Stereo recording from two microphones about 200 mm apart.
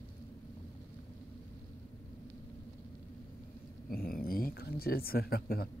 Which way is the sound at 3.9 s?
50° left (ahead or behind).